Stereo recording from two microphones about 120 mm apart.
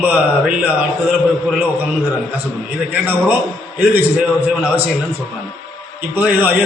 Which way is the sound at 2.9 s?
15° right (ahead or behind).